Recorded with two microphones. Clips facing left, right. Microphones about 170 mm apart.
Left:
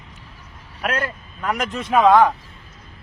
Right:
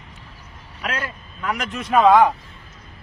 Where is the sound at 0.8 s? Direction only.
50° left (ahead or behind).